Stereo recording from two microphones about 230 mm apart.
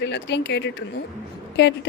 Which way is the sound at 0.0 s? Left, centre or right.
Left.